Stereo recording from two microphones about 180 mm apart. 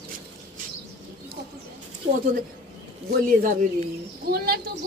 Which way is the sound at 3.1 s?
50° right (ahead or behind).